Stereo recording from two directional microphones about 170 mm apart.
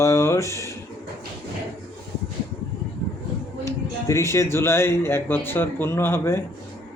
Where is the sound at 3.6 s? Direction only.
15° left (ahead or behind).